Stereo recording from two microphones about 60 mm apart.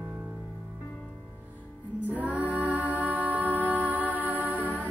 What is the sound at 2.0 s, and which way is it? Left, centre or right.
Music, right.